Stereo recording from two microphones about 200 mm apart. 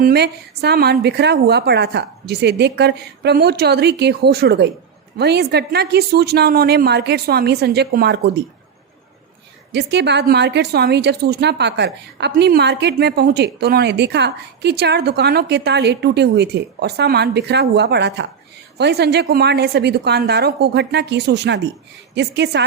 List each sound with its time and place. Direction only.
0.0 s a woman's voice: 55° right (ahead or behind)
9.7 s a woman's voice: 55° right (ahead or behind)